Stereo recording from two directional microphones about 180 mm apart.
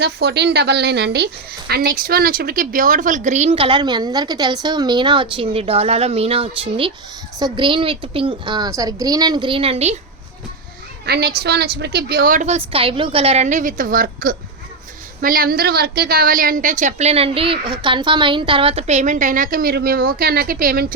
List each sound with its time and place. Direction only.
0.0 s a woman's voice: 65° right (ahead or behind); by 9.9 s 35° right (ahead or behind)
11.0 s a woman's voice: 60° right (ahead or behind)